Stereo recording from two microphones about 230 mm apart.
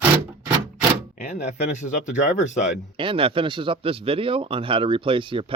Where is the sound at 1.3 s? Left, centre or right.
Left.